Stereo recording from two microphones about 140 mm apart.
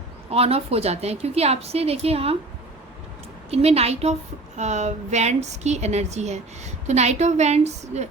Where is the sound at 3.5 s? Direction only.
45° right (ahead or behind).